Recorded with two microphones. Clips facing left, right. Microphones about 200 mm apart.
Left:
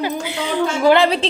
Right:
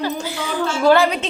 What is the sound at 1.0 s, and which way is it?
Speech, 30° left (ahead or behind).